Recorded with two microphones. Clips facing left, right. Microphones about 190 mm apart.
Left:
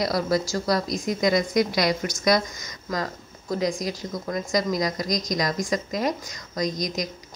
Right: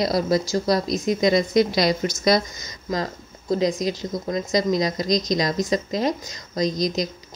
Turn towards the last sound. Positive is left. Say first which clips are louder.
# right 4 dB
turn(degrees=-25)  # may be behind; listen again after turning